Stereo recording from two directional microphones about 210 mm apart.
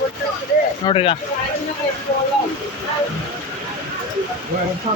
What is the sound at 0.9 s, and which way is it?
Speech, 25° left (ahead or behind).